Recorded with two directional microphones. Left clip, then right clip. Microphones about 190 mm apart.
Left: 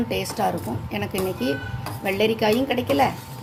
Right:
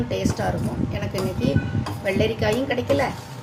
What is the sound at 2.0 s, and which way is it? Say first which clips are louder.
Speech: left 2 dB; 35° left (ahead or behind).